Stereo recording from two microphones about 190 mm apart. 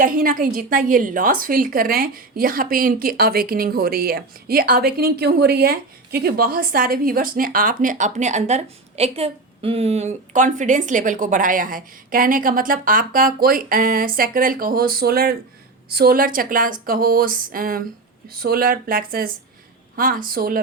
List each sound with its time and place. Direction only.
0.0 s a woman's voice: 50° right (ahead or behind)